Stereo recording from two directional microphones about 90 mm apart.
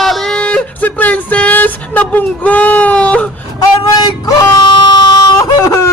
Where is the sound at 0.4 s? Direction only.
15° left (ahead or behind).